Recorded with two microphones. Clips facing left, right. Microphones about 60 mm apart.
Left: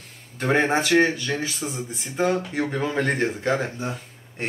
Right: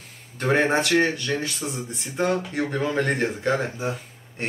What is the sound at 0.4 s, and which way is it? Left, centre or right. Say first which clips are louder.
Speech: even; centre.